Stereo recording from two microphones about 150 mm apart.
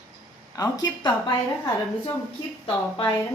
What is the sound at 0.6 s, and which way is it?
A woman's voice, 25° left (ahead or behind).